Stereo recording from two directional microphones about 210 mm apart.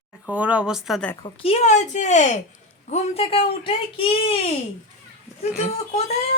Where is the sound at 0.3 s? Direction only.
5° right (ahead or behind).